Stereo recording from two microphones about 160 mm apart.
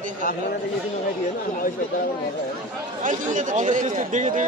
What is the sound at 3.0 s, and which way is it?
Speech, 50° right (ahead or behind).